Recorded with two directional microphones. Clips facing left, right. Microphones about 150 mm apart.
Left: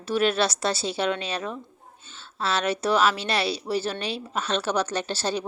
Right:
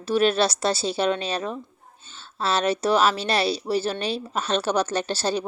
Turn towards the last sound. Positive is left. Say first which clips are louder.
# right 3 dB
turn(degrees=-40)  # may be behind; listen again after turning